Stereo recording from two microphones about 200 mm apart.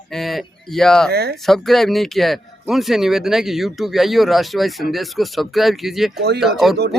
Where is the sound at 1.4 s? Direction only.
Centre (ahead or behind).